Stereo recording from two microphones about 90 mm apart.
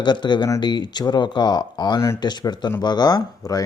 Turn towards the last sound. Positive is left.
turn(degrees=45)  # may be behind; listen again after turning